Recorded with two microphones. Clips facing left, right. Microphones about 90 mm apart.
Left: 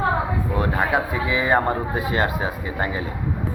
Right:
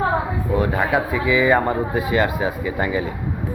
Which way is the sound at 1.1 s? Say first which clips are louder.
Right 3 dB; 35° left (ahead or behind).